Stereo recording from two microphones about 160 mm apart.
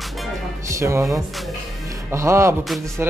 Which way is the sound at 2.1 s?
20° right (ahead or behind).